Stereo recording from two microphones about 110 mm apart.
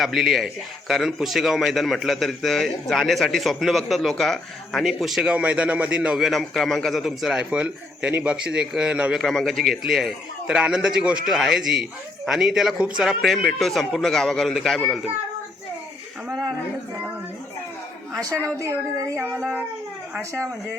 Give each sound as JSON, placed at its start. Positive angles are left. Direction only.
{"t": 0.0, "sound": "a man's voice", "side_deg": 0}
{"t": 9.2, "sound": "a man's voice", "side_deg": 5}
{"t": 18.4, "sound": "child singing", "side_deg": -25}
{"t": 19.3, "sound": "a man's voice", "side_deg": 0}